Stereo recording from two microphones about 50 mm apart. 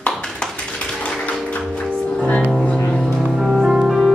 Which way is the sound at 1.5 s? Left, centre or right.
Left.